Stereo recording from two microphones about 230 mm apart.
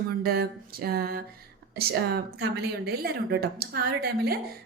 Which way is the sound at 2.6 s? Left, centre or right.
Right.